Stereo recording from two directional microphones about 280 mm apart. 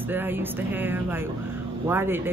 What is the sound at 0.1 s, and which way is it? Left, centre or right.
Speech, centre.